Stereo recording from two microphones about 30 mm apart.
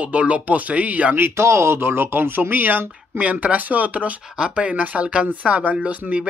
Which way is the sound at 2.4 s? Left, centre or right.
Right.